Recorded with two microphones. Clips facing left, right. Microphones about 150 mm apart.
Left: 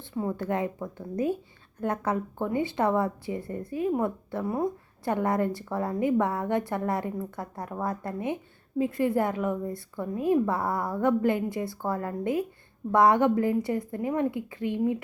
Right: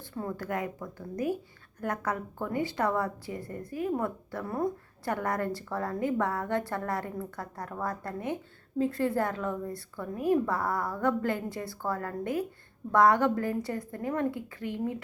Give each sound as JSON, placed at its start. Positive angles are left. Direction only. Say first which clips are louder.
{"t": 0.1, "sound": "a woman's voice", "louder": "left 5 dB", "side_deg": 20}